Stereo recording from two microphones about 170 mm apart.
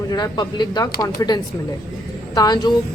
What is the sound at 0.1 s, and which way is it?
Speech, 25° left (ahead or behind).